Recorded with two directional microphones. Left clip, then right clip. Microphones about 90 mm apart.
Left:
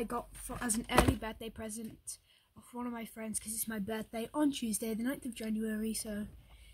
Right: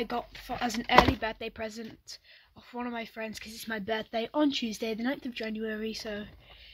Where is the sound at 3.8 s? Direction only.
15° left (ahead or behind).